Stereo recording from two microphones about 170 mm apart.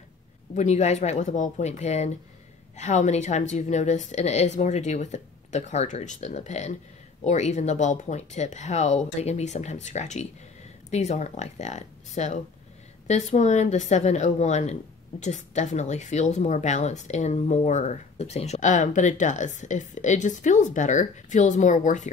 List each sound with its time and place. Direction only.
0.6 s a woman's voice: 45° left (ahead or behind)